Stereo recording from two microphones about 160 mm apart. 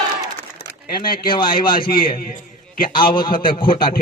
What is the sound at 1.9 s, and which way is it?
Speech, 65° left (ahead or behind).